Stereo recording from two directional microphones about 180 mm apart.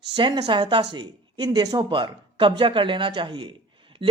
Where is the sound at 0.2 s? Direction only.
25° right (ahead or behind).